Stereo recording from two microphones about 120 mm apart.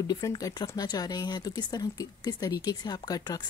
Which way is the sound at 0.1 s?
30° left (ahead or behind).